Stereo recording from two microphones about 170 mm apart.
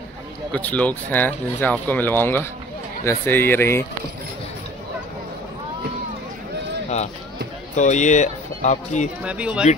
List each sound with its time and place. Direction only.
0.5 s speech: 10° left (ahead or behind)
7.7 s speech: 45° left (ahead or behind)
9.2 s speech: 5° right (ahead or behind)